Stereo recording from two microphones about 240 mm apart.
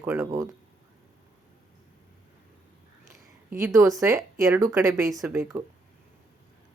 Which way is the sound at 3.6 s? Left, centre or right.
Centre.